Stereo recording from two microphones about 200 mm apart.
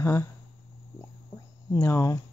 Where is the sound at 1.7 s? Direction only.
15° left (ahead or behind).